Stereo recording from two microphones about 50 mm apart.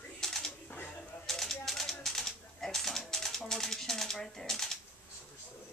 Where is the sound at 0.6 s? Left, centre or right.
Left.